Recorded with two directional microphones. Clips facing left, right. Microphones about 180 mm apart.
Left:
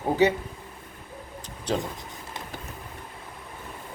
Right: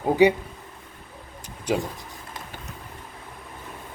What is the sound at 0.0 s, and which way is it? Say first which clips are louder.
Speech: right 4 dB; 15° right (ahead or behind).